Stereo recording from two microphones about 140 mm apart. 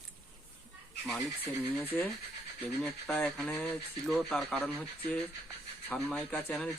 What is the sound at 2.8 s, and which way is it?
Speech, 5° left (ahead or behind).